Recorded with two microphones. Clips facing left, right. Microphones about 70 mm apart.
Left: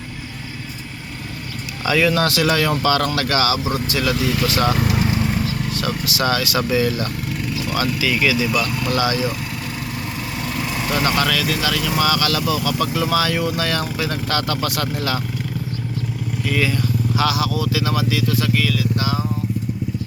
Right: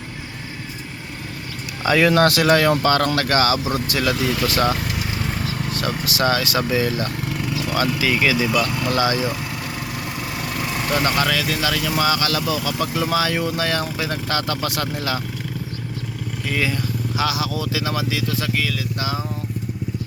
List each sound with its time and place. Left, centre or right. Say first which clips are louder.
1.8 s speech: right 2 dB; right
6.1 s speech: right 1 dB; right
8.4 s speech: right 1 dB; centre
8.9 s speech: left 1 dB; right
10.6 s vehicle: even; centre
11.0 s speech: left 3 dB; right
16.5 s speech: left 2 dB; centre